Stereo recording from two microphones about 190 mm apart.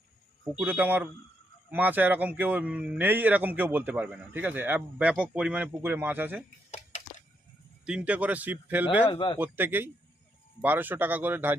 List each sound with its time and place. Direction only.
0.6 s speech: 10° right (ahead or behind)
7.9 s speech: 5° right (ahead or behind)
9.0 s speech: 25° left (ahead or behind)
9.4 s speech: 10° right (ahead or behind)